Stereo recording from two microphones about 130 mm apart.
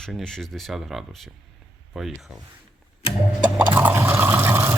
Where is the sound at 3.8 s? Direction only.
15° right (ahead or behind).